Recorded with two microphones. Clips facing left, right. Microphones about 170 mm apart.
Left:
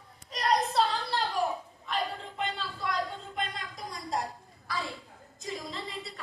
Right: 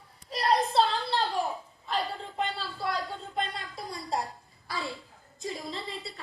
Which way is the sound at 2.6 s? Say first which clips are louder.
Even; 35° right (ahead or behind).